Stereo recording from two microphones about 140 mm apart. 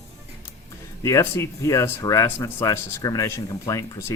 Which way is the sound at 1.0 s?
20° left (ahead or behind).